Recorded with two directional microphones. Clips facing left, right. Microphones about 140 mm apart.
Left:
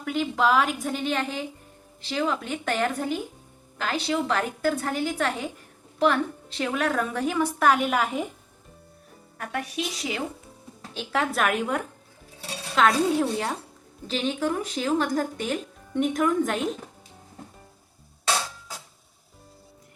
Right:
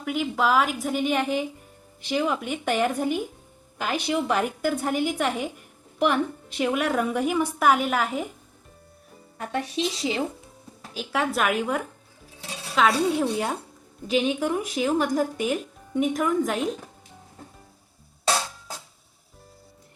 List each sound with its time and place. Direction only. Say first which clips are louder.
0.0 s speech: even; 5° right (ahead or behind)
9.4 s a woman's voice: right 3 dB; 25° right (ahead or behind)
10.9 s a woman's voice: even; 5° right (ahead or behind)